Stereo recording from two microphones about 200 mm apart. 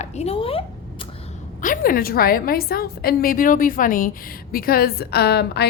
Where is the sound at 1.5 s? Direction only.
45° left (ahead or behind).